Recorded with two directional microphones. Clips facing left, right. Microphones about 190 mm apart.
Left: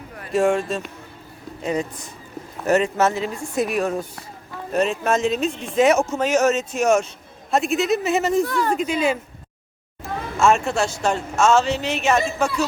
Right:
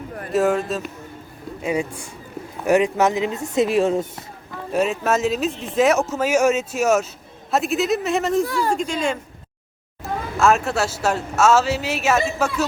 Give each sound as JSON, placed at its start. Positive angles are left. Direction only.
{"t": 0.3, "sound": "speech", "side_deg": 0}
{"t": 4.7, "sound": "speech", "side_deg": -5}